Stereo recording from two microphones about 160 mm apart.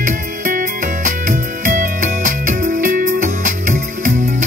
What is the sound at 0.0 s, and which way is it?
Music, 60° right (ahead or behind).